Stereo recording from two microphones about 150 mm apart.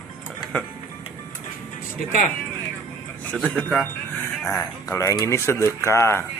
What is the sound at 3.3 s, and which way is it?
A man's voice, 10° left (ahead or behind).